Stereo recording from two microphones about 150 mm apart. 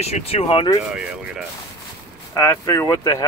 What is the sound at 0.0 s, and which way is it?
Speech, 45° left (ahead or behind).